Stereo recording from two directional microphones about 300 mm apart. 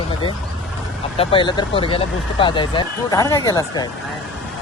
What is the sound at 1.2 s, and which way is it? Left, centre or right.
Speech, centre.